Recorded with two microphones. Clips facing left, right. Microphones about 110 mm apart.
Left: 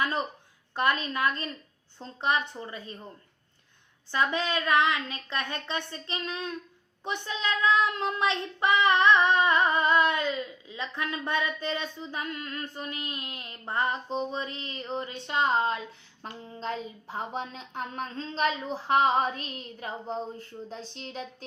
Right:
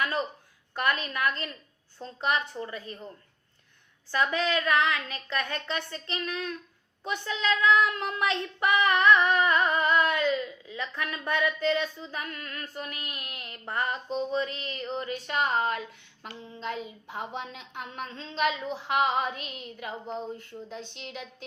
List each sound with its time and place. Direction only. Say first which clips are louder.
0.7 s female singing: left 2 dB; 25° left (ahead or behind)
4.1 s female singing: right 1 dB; 20° left (ahead or behind)
16.5 s speech: left 1 dB; 35° left (ahead or behind)